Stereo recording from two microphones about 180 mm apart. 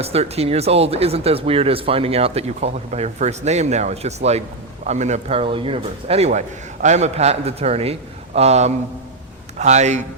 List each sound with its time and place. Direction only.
0.0 s speech: 35° right (ahead or behind)